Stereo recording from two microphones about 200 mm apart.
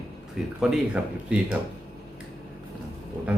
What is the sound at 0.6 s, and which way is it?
Speech, 5° right (ahead or behind).